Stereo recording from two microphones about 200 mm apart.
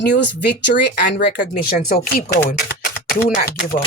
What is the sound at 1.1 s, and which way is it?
Speech, 55° left (ahead or behind).